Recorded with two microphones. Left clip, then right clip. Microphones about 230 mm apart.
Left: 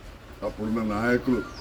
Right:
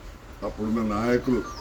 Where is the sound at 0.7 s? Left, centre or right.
Centre.